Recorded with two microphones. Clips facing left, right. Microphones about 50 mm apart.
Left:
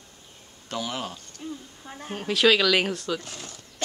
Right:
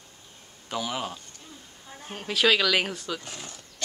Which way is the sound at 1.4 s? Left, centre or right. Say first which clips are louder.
Left 12 dB; left.